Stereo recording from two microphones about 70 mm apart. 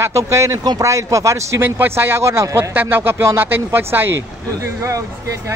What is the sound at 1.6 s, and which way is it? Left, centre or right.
Speech, right.